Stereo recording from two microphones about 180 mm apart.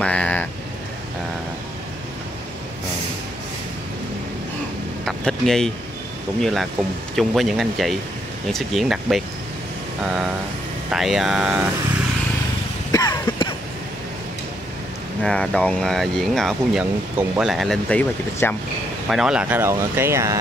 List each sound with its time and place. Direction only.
0.0 s vehicle: 5° left (ahead or behind)
5.0 s speech: centre (ahead or behind)
12.9 s a sound: 20° left (ahead or behind)
15.2 s speech: 5° left (ahead or behind)
19.0 s speech: 5° right (ahead or behind)